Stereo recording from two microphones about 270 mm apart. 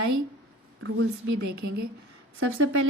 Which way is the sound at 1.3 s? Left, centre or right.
Right.